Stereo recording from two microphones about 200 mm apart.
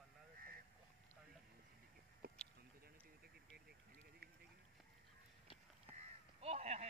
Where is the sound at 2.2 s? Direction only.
50° right (ahead or behind).